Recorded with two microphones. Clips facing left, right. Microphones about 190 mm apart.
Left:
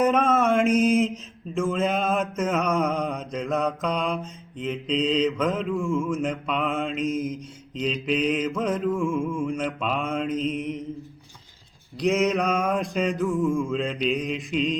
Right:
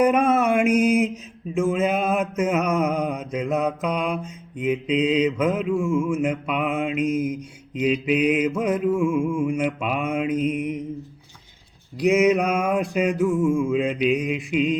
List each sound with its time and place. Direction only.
0.0 s mantra: 10° right (ahead or behind)
7.0 s mantra: 55° right (ahead or behind)
7.3 s mantra: 10° right (ahead or behind)
11.9 s mantra: 10° right (ahead or behind)